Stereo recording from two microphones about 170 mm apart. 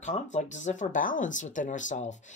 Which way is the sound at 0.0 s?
45° left (ahead or behind).